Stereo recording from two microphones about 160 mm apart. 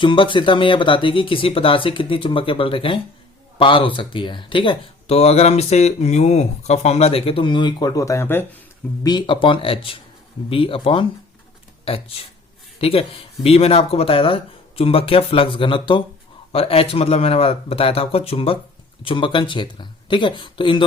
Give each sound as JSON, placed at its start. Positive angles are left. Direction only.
{"t": 0.0, "sound": "speech", "side_deg": 30}
{"t": 9.0, "sound": "speech", "side_deg": 30}
{"t": 12.8, "sound": "speech", "side_deg": 35}